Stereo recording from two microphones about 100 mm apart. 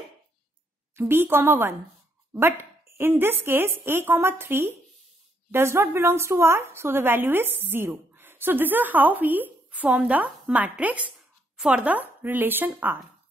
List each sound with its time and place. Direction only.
0.9 s a woman's voice: 20° right (ahead or behind)